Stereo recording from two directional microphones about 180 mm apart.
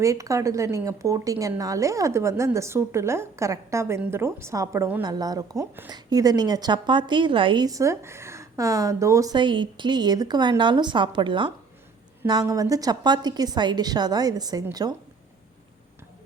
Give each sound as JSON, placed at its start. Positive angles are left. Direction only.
{"t": 0.0, "sound": "a woman's voice", "side_deg": -15}